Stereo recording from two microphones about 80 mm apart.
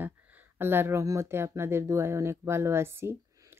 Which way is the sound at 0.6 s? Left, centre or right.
Right.